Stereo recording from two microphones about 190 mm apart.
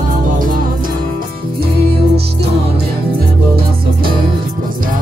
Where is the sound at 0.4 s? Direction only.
45° right (ahead or behind).